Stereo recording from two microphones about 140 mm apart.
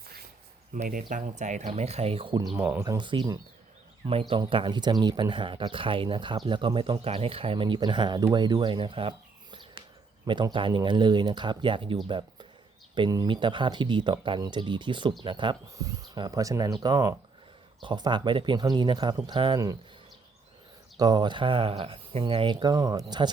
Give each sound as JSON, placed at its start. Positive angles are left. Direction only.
{"t": 0.7, "sound": "speech", "side_deg": -75}
{"t": 1.1, "sound": "speech", "side_deg": -60}
{"t": 2.6, "sound": "speech", "side_deg": -15}
{"t": 2.8, "sound": "speech", "side_deg": -30}
{"t": 4.0, "sound": "speech", "side_deg": -40}
{"t": 21.0, "sound": "speech", "side_deg": -30}